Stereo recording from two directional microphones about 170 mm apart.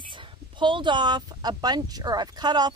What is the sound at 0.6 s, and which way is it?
Speech, 30° right (ahead or behind).